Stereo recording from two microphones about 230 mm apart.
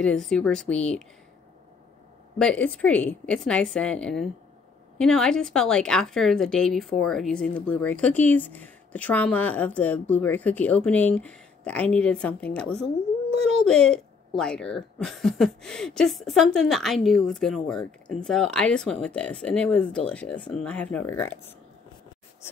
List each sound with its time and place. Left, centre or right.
0.0 s a woman's voice: centre
2.3 s a woman's voice: centre